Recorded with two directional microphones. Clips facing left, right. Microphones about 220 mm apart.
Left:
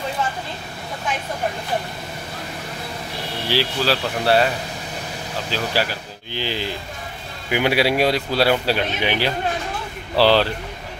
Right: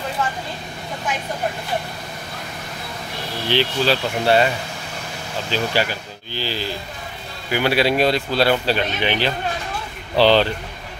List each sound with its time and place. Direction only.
3.4 s speech: 5° left (ahead or behind)
5.5 s speech: 5° left (ahead or behind)
6.3 s speech: 15° left (ahead or behind)